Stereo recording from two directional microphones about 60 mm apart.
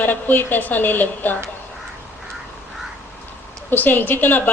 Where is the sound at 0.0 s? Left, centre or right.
Left.